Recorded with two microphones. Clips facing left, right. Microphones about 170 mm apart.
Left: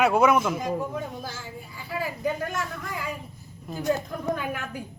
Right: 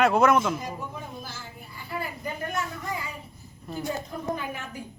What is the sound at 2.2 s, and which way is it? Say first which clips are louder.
A man's voice: left 5 dB; 90° left.